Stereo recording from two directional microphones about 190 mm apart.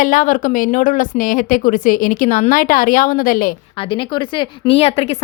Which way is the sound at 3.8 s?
25° left (ahead or behind).